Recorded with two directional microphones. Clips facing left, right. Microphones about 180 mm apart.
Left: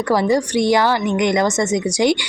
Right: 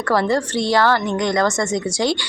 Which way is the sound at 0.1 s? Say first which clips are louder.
Left 2 dB; 15° left (ahead or behind).